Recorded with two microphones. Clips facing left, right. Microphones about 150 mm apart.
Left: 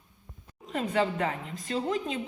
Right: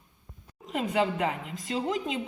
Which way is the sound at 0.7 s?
15° right (ahead or behind).